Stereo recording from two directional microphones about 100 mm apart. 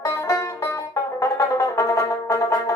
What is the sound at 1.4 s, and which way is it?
Brass instrument, 35° left (ahead or behind).